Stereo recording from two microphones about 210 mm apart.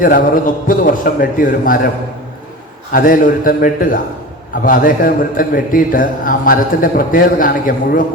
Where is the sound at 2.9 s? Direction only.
40° left (ahead or behind).